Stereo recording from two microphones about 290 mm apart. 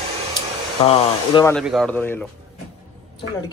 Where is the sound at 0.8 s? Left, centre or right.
Centre.